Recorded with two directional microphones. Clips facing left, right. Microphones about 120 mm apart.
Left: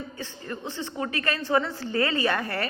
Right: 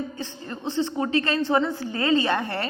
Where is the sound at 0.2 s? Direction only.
30° right (ahead or behind).